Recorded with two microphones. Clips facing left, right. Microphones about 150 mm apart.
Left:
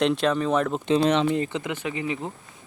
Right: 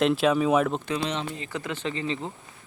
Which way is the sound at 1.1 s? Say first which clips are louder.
Left 10 dB; 65° left (ahead or behind).